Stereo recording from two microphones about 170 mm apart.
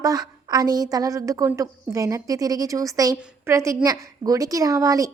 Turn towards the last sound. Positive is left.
turn(degrees=-20)  # may be behind; listen again after turning